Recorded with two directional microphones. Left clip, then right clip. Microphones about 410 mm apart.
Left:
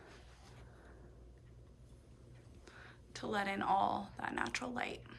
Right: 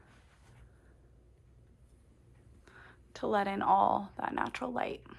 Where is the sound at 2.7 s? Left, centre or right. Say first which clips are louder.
Right 2 dB; centre.